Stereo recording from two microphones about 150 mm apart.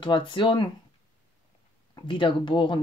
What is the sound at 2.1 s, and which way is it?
Speech, 35° left (ahead or behind).